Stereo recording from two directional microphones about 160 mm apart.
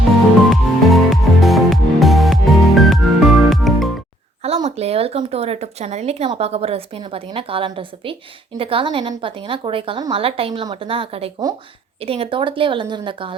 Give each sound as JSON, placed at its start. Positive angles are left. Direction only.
{"t": 0.5, "sound": "music", "side_deg": 0}
{"t": 4.4, "sound": "speech", "side_deg": -40}